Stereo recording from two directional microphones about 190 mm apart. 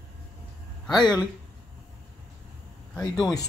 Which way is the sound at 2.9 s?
5° left (ahead or behind).